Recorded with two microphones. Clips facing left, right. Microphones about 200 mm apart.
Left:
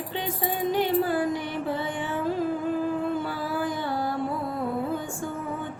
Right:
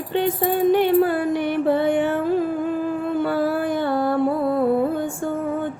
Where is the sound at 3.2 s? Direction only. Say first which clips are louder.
Right 8 dB; 60° right (ahead or behind).